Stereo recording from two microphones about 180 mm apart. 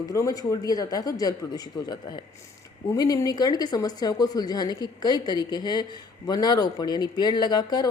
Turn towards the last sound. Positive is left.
turn(degrees=20)  # may be behind; listen again after turning